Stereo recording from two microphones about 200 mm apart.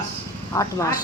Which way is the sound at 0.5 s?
15° left (ahead or behind).